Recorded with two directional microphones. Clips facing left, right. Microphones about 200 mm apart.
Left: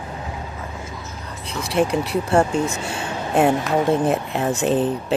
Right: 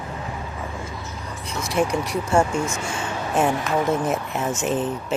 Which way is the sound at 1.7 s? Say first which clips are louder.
Left 3 dB; 30° left (ahead or behind).